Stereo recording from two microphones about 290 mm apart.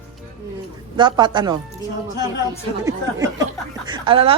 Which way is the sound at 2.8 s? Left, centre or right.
Centre.